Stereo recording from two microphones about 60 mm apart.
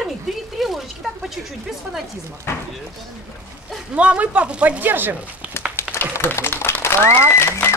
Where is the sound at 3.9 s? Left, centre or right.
Right.